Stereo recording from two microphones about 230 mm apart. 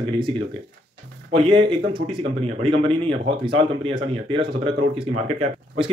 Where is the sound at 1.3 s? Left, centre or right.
Right.